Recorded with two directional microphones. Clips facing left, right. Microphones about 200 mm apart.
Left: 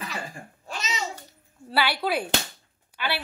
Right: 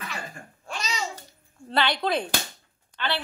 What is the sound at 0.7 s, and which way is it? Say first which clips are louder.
Babbling: even; 20° left (ahead or behind).